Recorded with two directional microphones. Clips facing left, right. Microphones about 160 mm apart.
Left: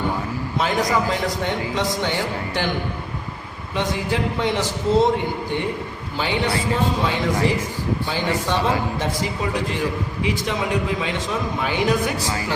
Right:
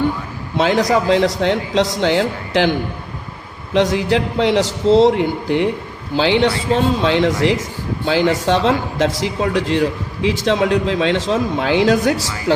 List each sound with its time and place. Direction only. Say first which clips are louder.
0.6 s a man's voice: right 6 dB; 90° right
3.8 s a man's voice: right 8 dB; 90° right